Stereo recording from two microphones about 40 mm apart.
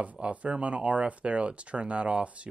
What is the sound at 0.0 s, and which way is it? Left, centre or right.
Speech, right.